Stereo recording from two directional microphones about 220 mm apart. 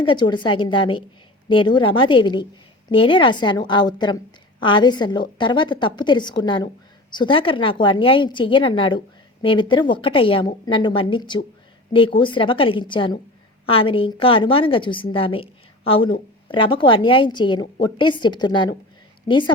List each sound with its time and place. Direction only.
0.0 s a woman's voice: 20° left (ahead or behind)